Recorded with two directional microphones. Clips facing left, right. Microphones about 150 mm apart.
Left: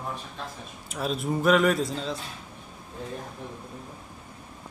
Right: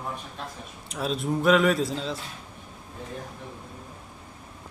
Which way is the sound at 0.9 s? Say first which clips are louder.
Right 1 dB; centre (ahead or behind).